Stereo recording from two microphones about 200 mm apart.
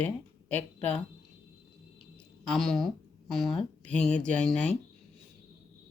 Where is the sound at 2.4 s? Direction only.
Centre (ahead or behind).